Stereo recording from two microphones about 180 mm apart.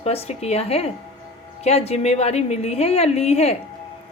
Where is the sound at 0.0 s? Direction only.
35° left (ahead or behind).